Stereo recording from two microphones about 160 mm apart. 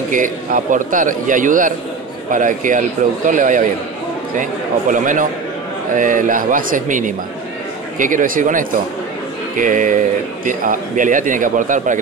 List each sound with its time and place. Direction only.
0.1 s a man's voice: 55° right (ahead or behind)